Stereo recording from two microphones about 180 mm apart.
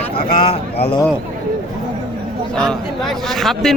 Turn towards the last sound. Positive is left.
turn(degrees=0)  # may be behind; listen again after turning